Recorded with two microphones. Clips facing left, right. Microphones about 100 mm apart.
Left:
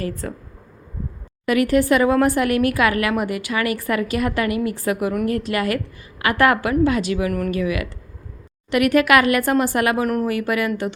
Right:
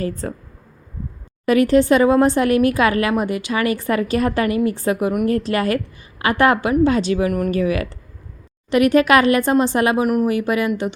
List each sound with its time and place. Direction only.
0.0 s speech: 30° right (ahead or behind)
1.5 s speech: 30° right (ahead or behind)
7.5 s speech: 35° right (ahead or behind)